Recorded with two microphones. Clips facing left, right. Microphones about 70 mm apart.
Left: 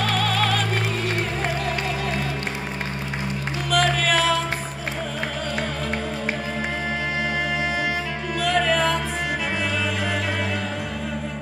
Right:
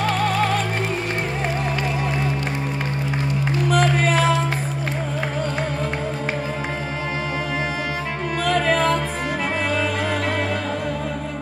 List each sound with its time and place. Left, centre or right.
0.1 s music: right
3.6 s music: right
8.5 s music: right